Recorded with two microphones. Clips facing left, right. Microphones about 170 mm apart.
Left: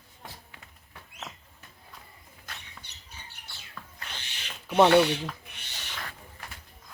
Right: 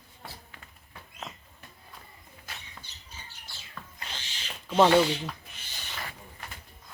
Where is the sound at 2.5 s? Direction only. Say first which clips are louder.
Even; 5° right (ahead or behind).